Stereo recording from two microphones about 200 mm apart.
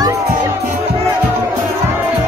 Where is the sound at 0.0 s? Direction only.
20° right (ahead or behind).